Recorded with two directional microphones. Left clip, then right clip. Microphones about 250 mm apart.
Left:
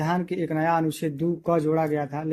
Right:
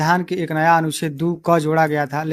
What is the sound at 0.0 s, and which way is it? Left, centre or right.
Speech, centre.